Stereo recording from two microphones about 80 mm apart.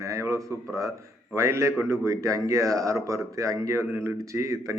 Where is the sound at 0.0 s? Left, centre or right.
Right.